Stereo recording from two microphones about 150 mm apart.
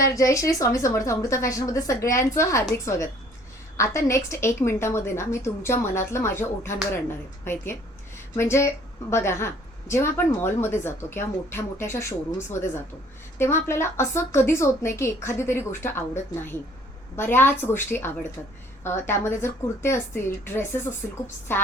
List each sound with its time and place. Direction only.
0.1 s a woman's voice: 20° left (ahead or behind)